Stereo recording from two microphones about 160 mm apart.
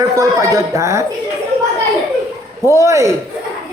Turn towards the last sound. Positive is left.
turn(degrees=-20)  # may be behind; listen again after turning